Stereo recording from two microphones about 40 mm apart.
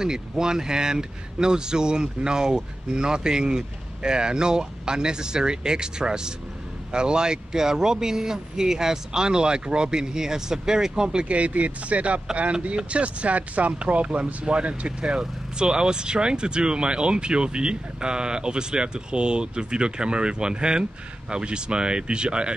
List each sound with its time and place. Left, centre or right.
0.0 s speech: centre
11.2 s speech: right